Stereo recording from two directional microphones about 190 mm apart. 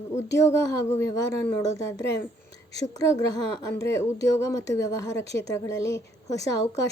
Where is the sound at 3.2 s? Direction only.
15° left (ahead or behind).